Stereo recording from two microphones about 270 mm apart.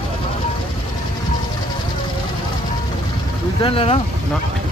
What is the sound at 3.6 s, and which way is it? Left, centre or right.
Speech, centre.